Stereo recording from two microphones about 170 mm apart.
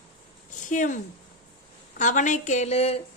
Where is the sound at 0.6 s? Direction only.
50° left (ahead or behind).